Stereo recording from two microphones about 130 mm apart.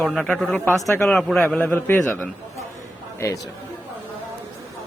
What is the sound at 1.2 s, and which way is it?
Speech, 5° left (ahead or behind).